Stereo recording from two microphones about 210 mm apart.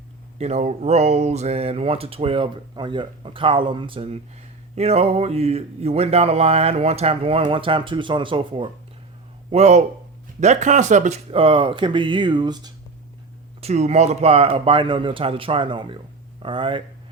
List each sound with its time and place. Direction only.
0.3 s a man's voice: 30° right (ahead or behind)
13.6 s speech: 30° right (ahead or behind)